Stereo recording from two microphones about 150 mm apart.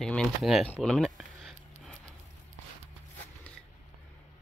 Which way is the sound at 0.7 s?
Centre (ahead or behind).